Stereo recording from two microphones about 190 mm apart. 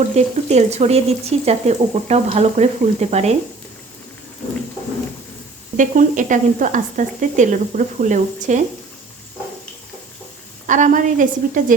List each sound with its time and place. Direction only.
0.2 s speech: 35° right (ahead or behind)
5.7 s speech: 45° right (ahead or behind)
10.7 s a woman's voice: 40° right (ahead or behind)